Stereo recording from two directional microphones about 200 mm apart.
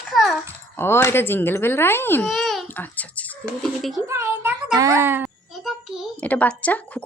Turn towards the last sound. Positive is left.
turn(degrees=5)  # may be behind; listen again after turning